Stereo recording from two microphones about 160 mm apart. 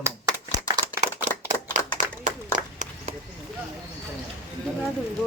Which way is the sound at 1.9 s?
50° right (ahead or behind).